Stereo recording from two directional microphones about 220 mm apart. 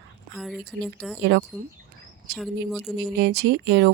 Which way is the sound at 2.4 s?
Centre (ahead or behind).